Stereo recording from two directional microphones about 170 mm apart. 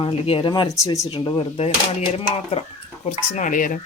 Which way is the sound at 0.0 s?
35° left (ahead or behind).